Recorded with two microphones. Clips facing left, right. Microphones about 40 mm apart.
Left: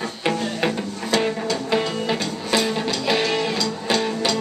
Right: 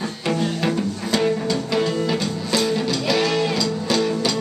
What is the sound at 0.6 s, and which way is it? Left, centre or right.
Music, centre.